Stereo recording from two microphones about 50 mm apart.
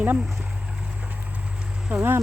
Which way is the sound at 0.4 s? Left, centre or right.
Right.